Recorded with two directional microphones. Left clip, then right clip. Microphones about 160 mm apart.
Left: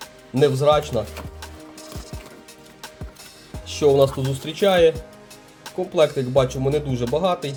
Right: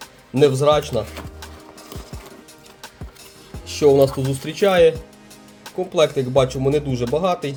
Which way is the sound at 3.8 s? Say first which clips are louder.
Right 2 dB; 10° right (ahead or behind).